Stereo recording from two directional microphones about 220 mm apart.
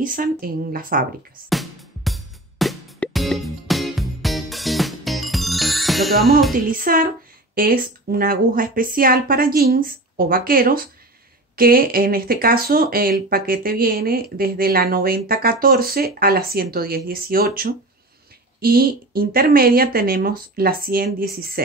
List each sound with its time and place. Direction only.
0.0 s speech: 40° right (ahead or behind)
1.5 s music: centre (ahead or behind)
6.5 s speech: 40° right (ahead or behind)